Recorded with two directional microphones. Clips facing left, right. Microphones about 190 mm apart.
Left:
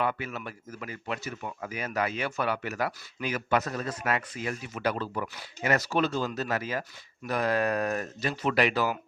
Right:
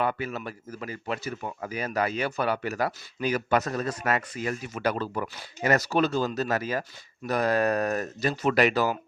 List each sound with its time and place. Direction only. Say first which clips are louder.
0.0 s speech: right 2 dB; 40° right (ahead or behind)